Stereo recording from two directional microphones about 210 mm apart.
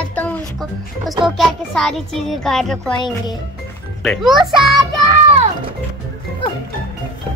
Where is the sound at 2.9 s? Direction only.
20° left (ahead or behind).